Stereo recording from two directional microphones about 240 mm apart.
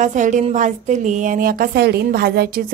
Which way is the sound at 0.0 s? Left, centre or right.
Right.